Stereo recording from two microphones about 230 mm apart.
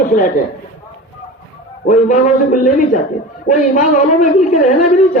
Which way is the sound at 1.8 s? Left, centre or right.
Left.